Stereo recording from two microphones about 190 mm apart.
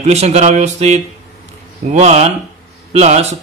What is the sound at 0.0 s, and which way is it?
Speech, 35° right (ahead or behind).